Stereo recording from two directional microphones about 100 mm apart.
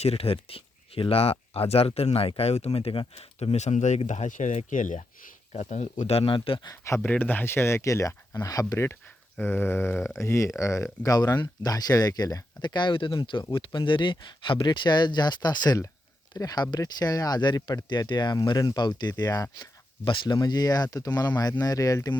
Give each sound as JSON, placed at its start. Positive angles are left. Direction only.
{"t": 0.0, "sound": "speech", "side_deg": 85}
{"t": 6.1, "sound": "speech", "side_deg": 80}
{"t": 6.8, "sound": "speech", "side_deg": 30}
{"t": 7.1, "sound": "speech", "side_deg": 15}
{"t": 20.1, "sound": "speech", "side_deg": 50}